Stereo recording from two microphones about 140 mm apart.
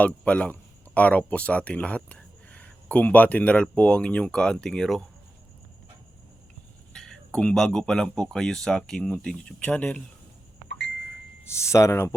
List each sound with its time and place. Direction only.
0.0 s speech: 10° left (ahead or behind)
6.9 s speech: 5° left (ahead or behind)
11.4 s speech: 20° left (ahead or behind)